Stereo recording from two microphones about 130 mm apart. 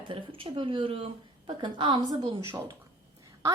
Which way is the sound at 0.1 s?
45° right (ahead or behind).